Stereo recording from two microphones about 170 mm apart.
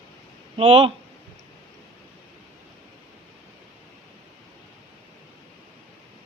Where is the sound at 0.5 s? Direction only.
30° right (ahead or behind).